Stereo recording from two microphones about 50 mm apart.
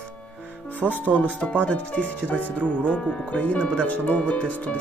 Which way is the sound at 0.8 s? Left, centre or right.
Right.